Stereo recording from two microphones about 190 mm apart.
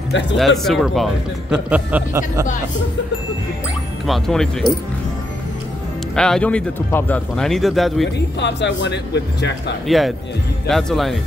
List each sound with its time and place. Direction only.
0.4 s speech: centre (ahead or behind)
4.0 s speech: centre (ahead or behind)
6.1 s speech: 5° left (ahead or behind)
8.4 s speech: 65° left (ahead or behind)
9.8 s speech: centre (ahead or behind)